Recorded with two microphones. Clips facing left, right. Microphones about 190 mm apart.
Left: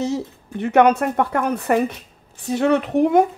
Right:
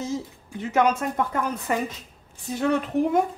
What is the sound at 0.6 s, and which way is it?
Speech, 65° left (ahead or behind).